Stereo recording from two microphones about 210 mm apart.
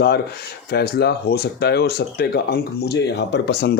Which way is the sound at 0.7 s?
50° left (ahead or behind).